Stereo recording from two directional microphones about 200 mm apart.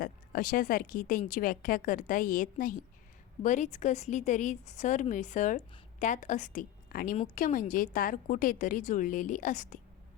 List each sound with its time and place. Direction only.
0.0 s a woman's voice: 45° left (ahead or behind)